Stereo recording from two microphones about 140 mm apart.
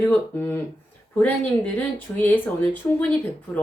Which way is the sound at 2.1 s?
15° left (ahead or behind).